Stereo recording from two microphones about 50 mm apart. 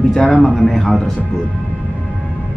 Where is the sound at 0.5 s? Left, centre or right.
Centre.